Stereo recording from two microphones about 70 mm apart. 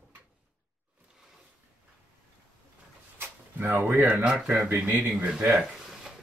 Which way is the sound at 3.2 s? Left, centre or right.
Right.